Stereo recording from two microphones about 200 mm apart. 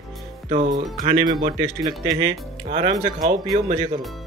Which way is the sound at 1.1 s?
25° right (ahead or behind).